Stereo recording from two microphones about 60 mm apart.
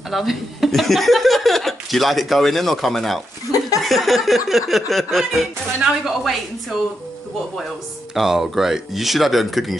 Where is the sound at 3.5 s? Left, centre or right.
Left.